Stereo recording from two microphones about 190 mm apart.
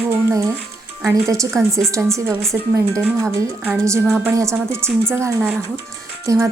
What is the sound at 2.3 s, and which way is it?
Speech, centre (ahead or behind).